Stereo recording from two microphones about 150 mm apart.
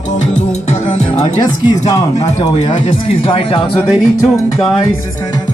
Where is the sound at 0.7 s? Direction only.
50° left (ahead or behind).